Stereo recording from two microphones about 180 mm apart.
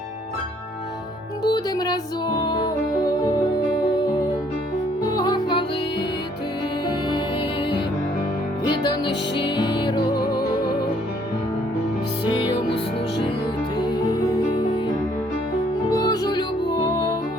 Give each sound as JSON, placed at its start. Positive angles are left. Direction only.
{"t": 1.5, "sound": "music", "side_deg": 25}
{"t": 5.0, "sound": "music", "side_deg": 20}
{"t": 8.7, "sound": "music", "side_deg": 25}
{"t": 12.3, "sound": "music", "side_deg": 25}
{"t": 13.7, "sound": "music", "side_deg": 25}
{"t": 15.9, "sound": "music", "side_deg": 20}